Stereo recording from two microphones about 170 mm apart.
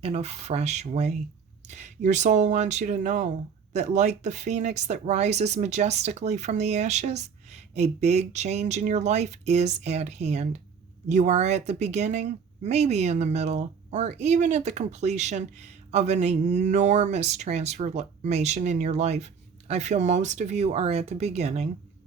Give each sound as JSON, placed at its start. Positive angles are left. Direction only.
{"t": 0.0, "sound": "speech", "side_deg": -40}